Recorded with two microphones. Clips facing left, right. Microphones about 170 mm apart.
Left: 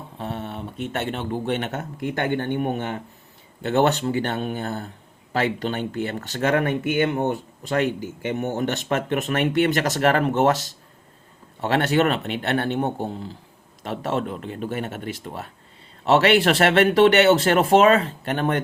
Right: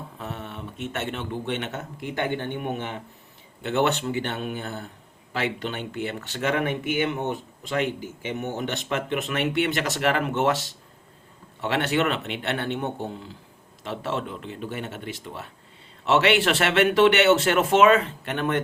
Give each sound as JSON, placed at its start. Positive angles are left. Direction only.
{"t": 0.2, "sound": "speech", "side_deg": 30}
{"t": 8.4, "sound": "speech", "side_deg": 45}